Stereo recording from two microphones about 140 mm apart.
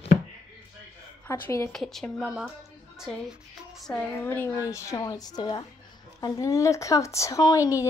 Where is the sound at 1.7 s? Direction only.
Centre (ahead or behind).